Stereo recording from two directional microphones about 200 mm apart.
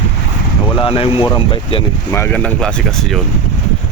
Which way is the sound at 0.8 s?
30° left (ahead or behind).